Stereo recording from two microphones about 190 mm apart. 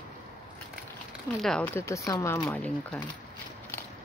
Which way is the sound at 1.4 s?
5° left (ahead or behind).